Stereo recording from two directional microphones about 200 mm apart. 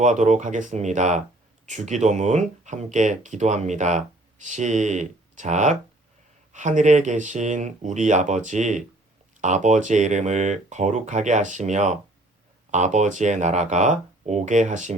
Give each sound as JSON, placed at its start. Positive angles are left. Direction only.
{"t": 0.0, "sound": "speech", "side_deg": -35}